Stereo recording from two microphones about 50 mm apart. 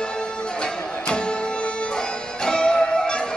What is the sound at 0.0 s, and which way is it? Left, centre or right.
Music, centre.